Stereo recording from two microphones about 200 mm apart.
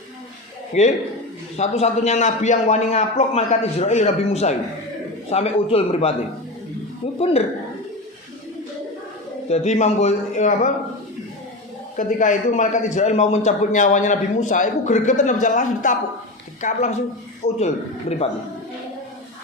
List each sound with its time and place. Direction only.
0.7 s a man's voice: 35° left (ahead or behind)
7.2 s a man's voice: 30° left (ahead or behind)
9.5 s a man's voice: 35° left (ahead or behind)
11.9 s a man's voice: 40° left (ahead or behind)